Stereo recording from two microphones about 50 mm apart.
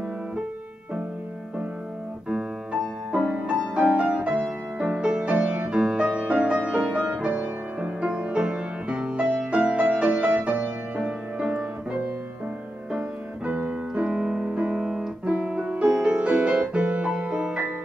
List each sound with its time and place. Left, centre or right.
2.7 s music: right
11.0 s music: centre
13.7 s keyboard: right
14.4 s music: right